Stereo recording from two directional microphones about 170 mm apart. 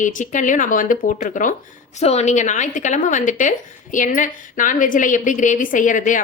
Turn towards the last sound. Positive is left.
turn(degrees=50)  # may be behind; listen again after turning